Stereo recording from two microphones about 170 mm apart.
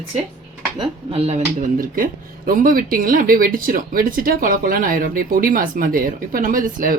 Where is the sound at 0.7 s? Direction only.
35° right (ahead or behind).